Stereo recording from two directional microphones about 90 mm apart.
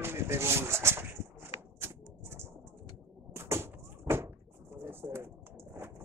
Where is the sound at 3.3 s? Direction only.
30° right (ahead or behind).